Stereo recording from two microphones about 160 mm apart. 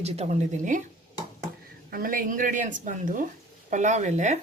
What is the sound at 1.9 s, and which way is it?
A woman's voice, 60° right (ahead or behind).